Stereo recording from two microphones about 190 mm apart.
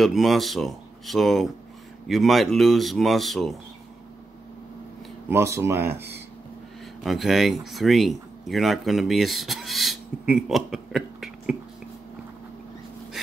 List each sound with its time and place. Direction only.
0.0 s speech: centre (ahead or behind)
5.3 s speech: 15° right (ahead or behind)
7.0 s speech: centre (ahead or behind)